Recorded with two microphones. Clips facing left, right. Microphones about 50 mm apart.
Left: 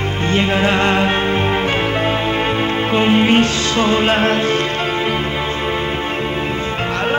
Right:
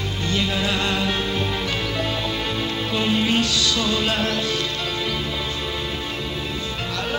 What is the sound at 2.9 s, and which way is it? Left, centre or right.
Music, left.